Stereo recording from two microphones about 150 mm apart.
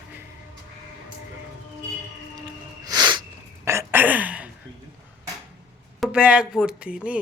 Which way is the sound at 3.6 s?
15° right (ahead or behind).